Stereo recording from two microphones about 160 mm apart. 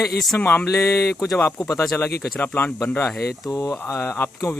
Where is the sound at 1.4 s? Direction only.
20° left (ahead or behind).